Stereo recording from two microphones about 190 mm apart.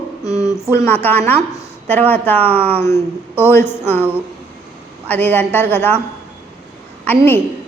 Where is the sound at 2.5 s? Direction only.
30° right (ahead or behind).